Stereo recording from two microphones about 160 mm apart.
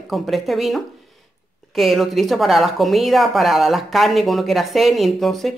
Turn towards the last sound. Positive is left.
turn(degrees=0)  # may be behind; listen again after turning